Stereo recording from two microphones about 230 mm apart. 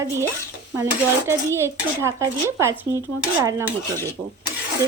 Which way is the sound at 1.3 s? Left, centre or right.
Centre.